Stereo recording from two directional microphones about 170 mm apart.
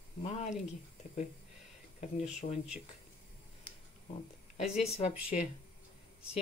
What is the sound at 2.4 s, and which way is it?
Speech, 40° left (ahead or behind).